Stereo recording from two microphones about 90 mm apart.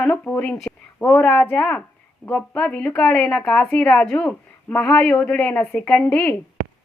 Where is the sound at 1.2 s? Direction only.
10° left (ahead or behind).